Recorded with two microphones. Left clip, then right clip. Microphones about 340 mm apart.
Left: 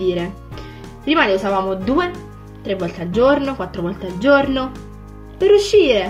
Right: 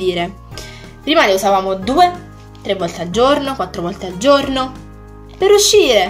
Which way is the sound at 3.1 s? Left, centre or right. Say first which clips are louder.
Right 1 dB; centre.